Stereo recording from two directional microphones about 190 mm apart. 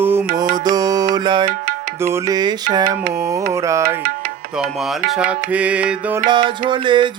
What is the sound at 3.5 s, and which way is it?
Music, 15° right (ahead or behind).